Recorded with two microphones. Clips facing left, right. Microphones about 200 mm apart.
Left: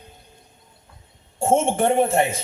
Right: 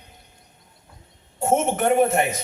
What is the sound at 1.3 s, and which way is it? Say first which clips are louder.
A man's voice: left 2 dB; 30° left (ahead or behind).